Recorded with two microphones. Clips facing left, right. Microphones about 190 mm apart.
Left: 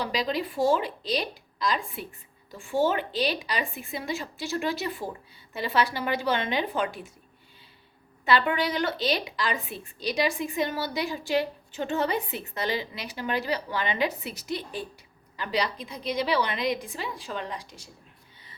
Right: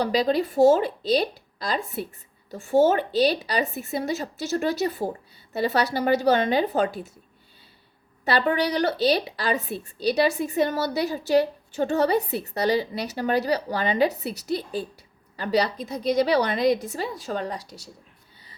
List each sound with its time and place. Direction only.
0.0 s a woman's voice: 40° right (ahead or behind)
8.2 s a woman's voice: 40° right (ahead or behind)